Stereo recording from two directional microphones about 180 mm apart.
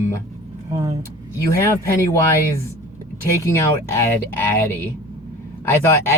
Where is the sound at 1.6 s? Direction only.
15° left (ahead or behind).